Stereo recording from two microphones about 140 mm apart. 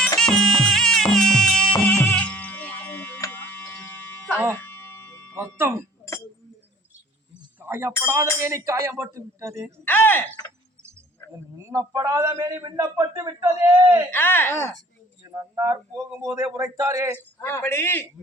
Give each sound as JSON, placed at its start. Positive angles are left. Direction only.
{"t": 0.2, "sound": "music", "side_deg": 5}
{"t": 3.2, "sound": "tick-tock", "side_deg": 20}
{"t": 4.6, "sound": "music", "side_deg": 15}
{"t": 5.5, "sound": "speech", "side_deg": -15}
{"t": 7.6, "sound": "a sound", "side_deg": -20}
{"t": 8.0, "sound": "a man's voice", "side_deg": -20}
{"t": 9.8, "sound": "a woman's voice", "side_deg": 15}
{"t": 11.5, "sound": "a man's voice", "side_deg": -25}
{"t": 14.1, "sound": "a woman's voice", "side_deg": 15}
{"t": 15.5, "sound": "a man's voice", "side_deg": -25}
{"t": 17.2, "sound": "a woman's voice", "side_deg": 15}